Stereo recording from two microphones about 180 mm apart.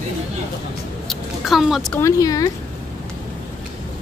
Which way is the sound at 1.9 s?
15° left (ahead or behind).